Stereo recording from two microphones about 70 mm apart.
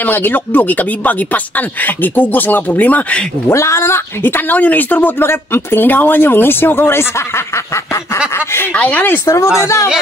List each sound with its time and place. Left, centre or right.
0.0 s speech: left
3.5 s speech: left
5.2 s speech: left
8.7 s speech: centre
9.2 s a woman's voice: left